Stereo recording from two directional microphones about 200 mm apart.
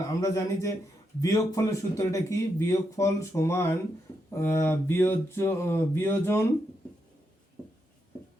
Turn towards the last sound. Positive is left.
turn(degrees=10)  # may be behind; listen again after turning